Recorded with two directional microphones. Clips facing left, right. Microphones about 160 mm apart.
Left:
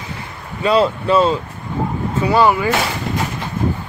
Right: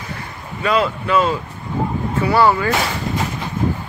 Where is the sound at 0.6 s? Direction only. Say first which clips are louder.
Left 3 dB; 30° left (ahead or behind).